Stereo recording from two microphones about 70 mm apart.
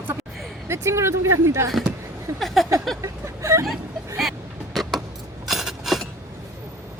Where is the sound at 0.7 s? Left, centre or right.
Right.